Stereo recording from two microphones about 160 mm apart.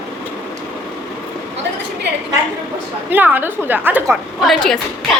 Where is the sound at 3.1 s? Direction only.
10° right (ahead or behind).